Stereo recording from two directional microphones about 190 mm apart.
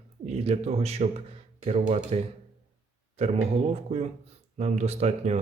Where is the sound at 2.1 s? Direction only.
35° right (ahead or behind).